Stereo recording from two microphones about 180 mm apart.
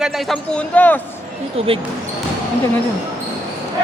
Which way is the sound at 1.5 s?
30° right (ahead or behind).